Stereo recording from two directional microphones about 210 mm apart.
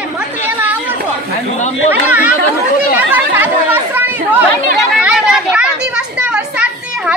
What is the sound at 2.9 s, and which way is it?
Chatter, 10° right (ahead or behind).